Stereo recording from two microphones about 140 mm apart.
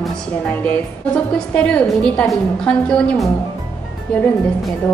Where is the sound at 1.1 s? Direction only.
10° left (ahead or behind).